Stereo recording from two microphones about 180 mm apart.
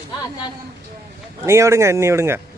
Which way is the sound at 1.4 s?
15° right (ahead or behind).